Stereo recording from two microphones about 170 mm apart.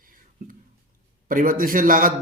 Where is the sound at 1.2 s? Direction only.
55° right (ahead or behind).